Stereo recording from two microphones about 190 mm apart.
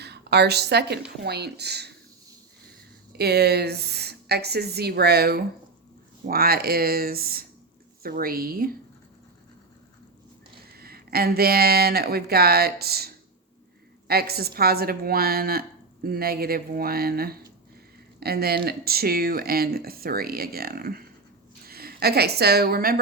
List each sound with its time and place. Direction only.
0.0 s a woman's voice: 60° right (ahead or behind)
3.1 s speech: 60° right (ahead or behind)
10.8 s a woman's voice: 55° right (ahead or behind)